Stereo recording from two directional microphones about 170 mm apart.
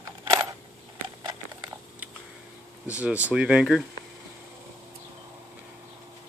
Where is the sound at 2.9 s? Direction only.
5° right (ahead or behind).